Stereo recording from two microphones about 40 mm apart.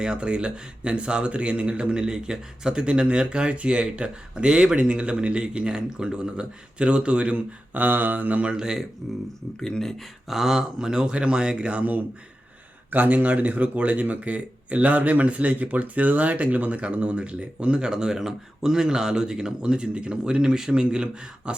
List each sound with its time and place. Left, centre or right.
0.0 s speech: right
8.5 s speech: centre
9.6 s speech: centre
10.0 s a sound: centre
10.6 s speech: centre